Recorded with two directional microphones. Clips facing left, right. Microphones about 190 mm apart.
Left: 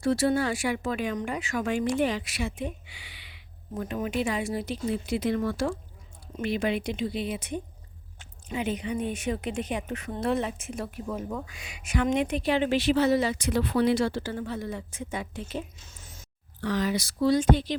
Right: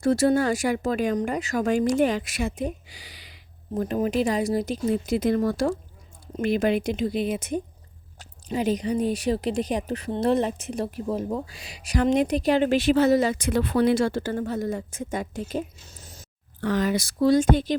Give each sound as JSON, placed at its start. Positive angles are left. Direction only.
{"t": 0.0, "sound": "speech", "side_deg": -45}
{"t": 16.6, "sound": "speech", "side_deg": -50}